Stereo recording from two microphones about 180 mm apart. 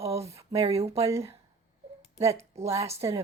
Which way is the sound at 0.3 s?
35° right (ahead or behind).